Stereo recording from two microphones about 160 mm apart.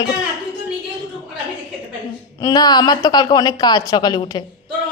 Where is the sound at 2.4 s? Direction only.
25° left (ahead or behind).